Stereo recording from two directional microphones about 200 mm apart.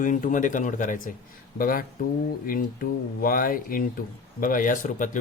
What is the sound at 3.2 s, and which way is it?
Speech, 45° left (ahead or behind).